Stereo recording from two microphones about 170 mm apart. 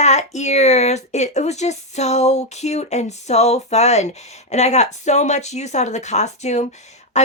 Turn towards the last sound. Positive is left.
turn(degrees=40)  # may be behind; listen again after turning